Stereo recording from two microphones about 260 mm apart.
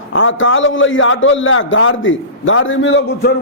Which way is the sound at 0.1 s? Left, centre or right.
Left.